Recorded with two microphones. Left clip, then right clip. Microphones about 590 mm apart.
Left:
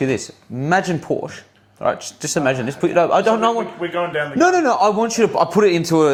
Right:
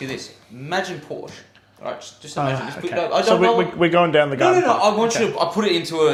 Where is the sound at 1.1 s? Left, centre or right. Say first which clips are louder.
Left 9 dB; left.